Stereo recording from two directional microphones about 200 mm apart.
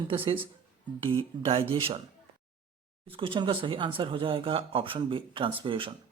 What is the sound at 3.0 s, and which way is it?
Speech, 25° right (ahead or behind).